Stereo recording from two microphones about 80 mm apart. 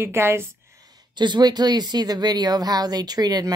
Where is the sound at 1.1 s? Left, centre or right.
Right.